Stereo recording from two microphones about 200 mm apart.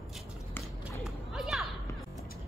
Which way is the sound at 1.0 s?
Centre (ahead or behind).